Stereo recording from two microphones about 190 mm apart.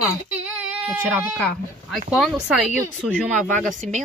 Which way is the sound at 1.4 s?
5° left (ahead or behind).